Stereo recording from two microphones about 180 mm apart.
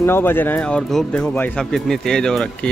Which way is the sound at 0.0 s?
10° left (ahead or behind).